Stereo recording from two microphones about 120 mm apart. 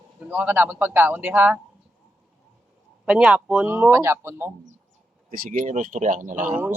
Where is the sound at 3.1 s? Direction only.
10° right (ahead or behind).